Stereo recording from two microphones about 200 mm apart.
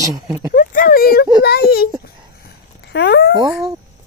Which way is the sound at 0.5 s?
45° left (ahead or behind).